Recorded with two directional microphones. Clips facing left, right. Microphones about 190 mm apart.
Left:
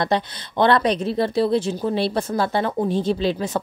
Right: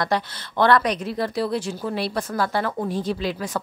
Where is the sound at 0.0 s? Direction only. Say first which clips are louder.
Left 2 dB; 25° left (ahead or behind).